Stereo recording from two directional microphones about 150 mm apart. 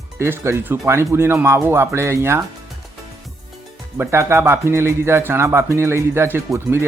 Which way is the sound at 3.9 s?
15° right (ahead or behind).